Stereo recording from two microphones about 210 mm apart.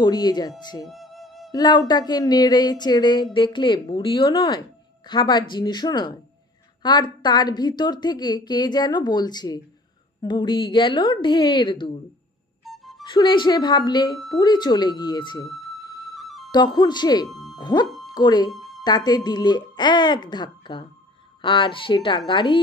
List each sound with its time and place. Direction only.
0.0 s a woman's voice: 20° left (ahead or behind)
0.8 s music: centre (ahead or behind)
1.5 s a woman's voice: 20° left (ahead or behind)
12.6 s music: centre (ahead or behind)
13.0 s a woman's voice: 20° left (ahead or behind)
15.8 s flute: 15° left (ahead or behind)
16.2 s music: centre (ahead or behind)
16.5 s a woman's voice: 20° left (ahead or behind)
17.3 s music: centre (ahead or behind)
17.6 s music: 20° left (ahead or behind)
18.0 s speech: 20° left (ahead or behind)
18.5 s music: centre (ahead or behind)
18.9 s a woman's voice: 20° left (ahead or behind)